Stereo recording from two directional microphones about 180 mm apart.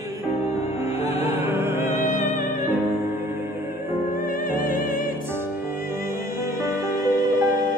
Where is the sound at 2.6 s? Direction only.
10° right (ahead or behind).